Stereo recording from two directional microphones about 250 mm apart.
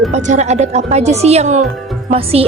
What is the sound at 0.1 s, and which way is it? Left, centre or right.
A woman's voice, right.